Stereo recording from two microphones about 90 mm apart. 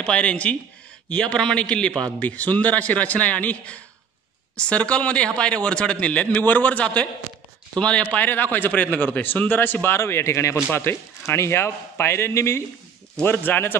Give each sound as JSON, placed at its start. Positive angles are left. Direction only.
{"t": 0.0, "sound": "a man's voice", "side_deg": 15}